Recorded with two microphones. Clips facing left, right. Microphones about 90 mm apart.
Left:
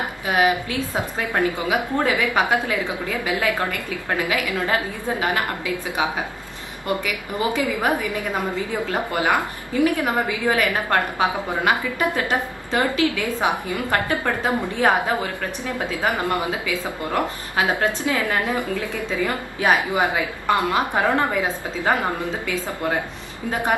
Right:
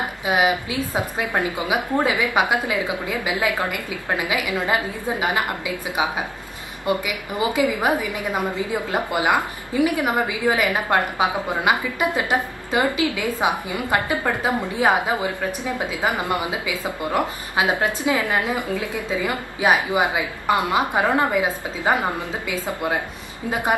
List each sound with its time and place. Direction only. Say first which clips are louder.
0.2 s a woman's voice: even; 15° right (ahead or behind)